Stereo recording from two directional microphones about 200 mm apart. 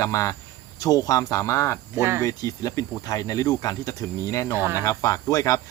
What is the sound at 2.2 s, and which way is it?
Speech, 15° left (ahead or behind).